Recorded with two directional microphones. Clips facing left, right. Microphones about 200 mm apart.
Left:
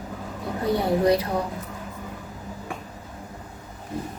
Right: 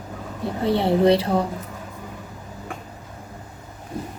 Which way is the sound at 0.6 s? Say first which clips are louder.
Right 3 dB; 25° right (ahead or behind).